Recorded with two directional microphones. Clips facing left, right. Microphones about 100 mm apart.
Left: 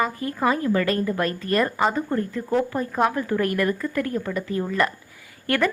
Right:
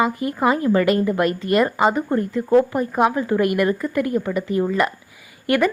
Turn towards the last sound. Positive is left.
turn(degrees=-15)  # may be behind; listen again after turning